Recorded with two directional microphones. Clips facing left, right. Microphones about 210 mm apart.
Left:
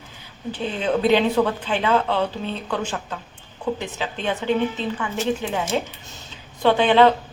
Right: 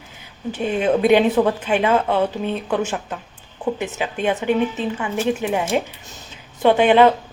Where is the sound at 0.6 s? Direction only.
15° right (ahead or behind).